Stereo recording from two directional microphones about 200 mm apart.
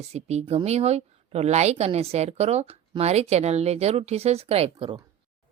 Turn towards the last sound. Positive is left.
turn(degrees=-25)  # may be behind; listen again after turning